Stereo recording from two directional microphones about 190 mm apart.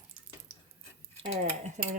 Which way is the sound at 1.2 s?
40° right (ahead or behind).